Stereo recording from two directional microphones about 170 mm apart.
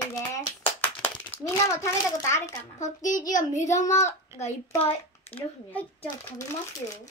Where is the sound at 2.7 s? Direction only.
45° left (ahead or behind).